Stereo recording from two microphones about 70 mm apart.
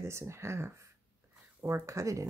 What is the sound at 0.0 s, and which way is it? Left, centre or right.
Speech, right.